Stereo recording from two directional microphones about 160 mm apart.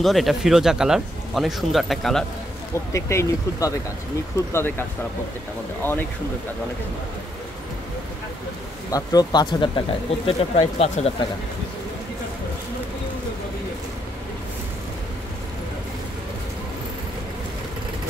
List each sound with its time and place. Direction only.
0.0 s speech: centre (ahead or behind)
2.7 s speech: 15° left (ahead or behind)
8.9 s speech: 25° left (ahead or behind); by 11.1 s 40° left (ahead or behind)